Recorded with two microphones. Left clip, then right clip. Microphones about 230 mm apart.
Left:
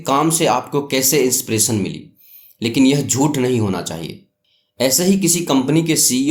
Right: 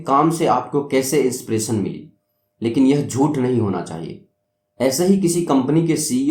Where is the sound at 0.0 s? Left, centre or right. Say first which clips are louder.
Even; left.